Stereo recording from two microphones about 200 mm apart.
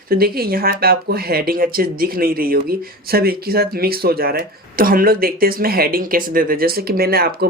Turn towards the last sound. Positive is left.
turn(degrees=-50)  # may be behind; listen again after turning